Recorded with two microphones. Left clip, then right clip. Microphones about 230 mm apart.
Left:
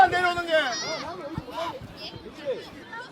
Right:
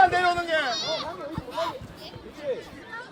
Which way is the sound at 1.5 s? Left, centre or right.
Right.